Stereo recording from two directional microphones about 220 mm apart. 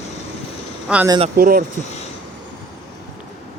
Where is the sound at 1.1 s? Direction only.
25° right (ahead or behind).